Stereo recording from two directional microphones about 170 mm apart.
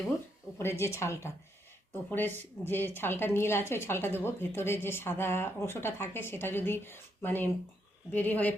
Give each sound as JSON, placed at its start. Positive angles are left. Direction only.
{"t": 0.6, "sound": "a woman's voice", "side_deg": 15}